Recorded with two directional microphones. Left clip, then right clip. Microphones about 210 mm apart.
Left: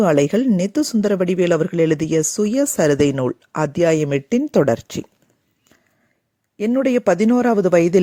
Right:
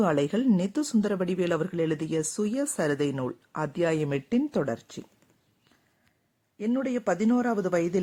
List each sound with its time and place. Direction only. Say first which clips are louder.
0.0 s speech: left 10 dB; 25° left (ahead or behind)
6.6 s speech: left 11 dB; 35° left (ahead or behind)